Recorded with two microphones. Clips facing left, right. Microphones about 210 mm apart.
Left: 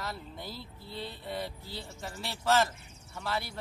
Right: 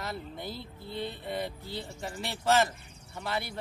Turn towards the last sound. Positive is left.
turn(degrees=-20)  # may be behind; listen again after turning